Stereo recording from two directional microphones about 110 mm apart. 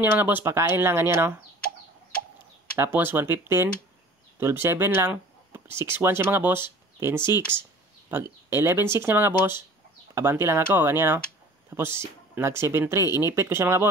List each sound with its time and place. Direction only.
0.0 s speech: 20° right (ahead or behind)
2.8 s speech: 20° right (ahead or behind)